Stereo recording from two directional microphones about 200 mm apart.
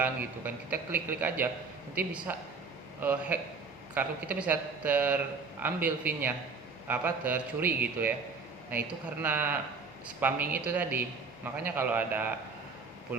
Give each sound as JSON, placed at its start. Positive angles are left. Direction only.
{"t": 0.0, "sound": "a man's voice", "side_deg": -10}